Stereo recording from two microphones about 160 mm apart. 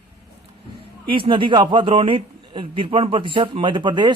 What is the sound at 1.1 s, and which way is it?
A man's voice, 30° right (ahead or behind).